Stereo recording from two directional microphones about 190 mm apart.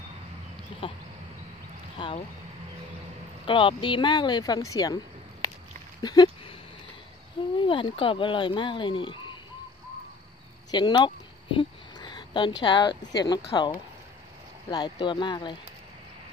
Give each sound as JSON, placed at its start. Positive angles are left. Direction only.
{"t": 0.8, "sound": "speech", "side_deg": 25}
{"t": 3.4, "sound": "speech", "side_deg": 25}
{"t": 6.0, "sound": "a sound", "side_deg": 20}
{"t": 7.6, "sound": "speech", "side_deg": 25}
{"t": 10.7, "sound": "speech", "side_deg": 20}
{"t": 11.5, "sound": "a sound", "side_deg": 25}
{"t": 12.6, "sound": "speech", "side_deg": 25}